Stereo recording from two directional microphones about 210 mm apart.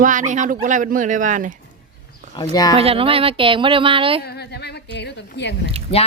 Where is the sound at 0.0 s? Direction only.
40° right (ahead or behind).